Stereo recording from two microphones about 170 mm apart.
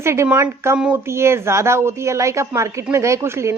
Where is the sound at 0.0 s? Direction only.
15° right (ahead or behind).